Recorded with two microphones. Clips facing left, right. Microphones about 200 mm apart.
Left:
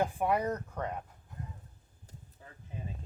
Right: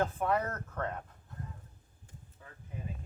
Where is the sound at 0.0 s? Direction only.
15° left (ahead or behind).